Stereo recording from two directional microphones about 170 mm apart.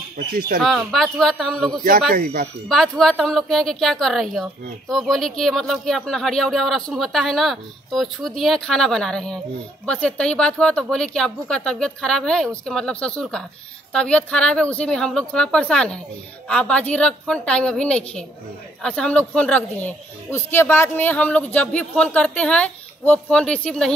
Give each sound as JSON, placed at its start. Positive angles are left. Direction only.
{"t": 0.3, "sound": "a man's voice", "side_deg": -60}
{"t": 0.6, "sound": "a woman's voice", "side_deg": 0}
{"t": 1.8, "sound": "a man's voice", "side_deg": -55}
{"t": 2.7, "sound": "a woman's voice", "side_deg": 0}